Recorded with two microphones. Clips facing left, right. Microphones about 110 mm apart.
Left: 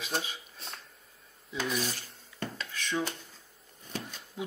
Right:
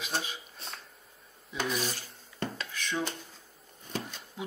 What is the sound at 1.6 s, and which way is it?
Speech, 25° right (ahead or behind).